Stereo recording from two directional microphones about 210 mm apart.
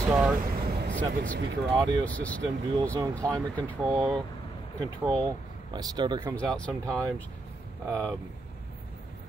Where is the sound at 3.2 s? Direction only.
15° right (ahead or behind).